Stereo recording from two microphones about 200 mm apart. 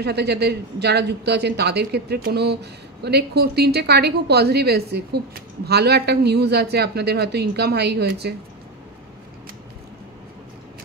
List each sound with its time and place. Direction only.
0.0 s speech: 55° right (ahead or behind)